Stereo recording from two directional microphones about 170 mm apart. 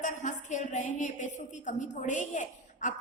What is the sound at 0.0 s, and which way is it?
A woman's voice, 45° left (ahead or behind).